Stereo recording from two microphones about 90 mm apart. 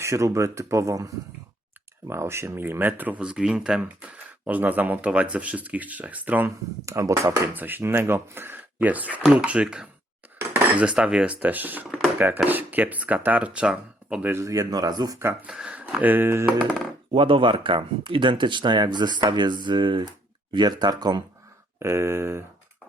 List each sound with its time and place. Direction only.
0.0 s speech: 35° right (ahead or behind); by 4.1 s 5° right (ahead or behind)
4.4 s speech: 20° right (ahead or behind)
6.8 s speech: 35° right (ahead or behind)
7.5 s speech: 20° right (ahead or behind)
14.4 s speech: 40° right (ahead or behind)
15.2 s speech: 25° right (ahead or behind)
15.4 s speech: 10° right (ahead or behind); by 16.6 s 25° right (ahead or behind)
17.2 s speech: 85° right; by 21.2 s 45° right (ahead or behind)
21.8 s speech: 30° right (ahead or behind)